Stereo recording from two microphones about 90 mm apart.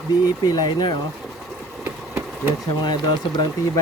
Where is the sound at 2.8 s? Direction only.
55° left (ahead or behind).